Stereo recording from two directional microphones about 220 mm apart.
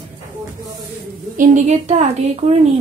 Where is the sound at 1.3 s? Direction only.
35° right (ahead or behind).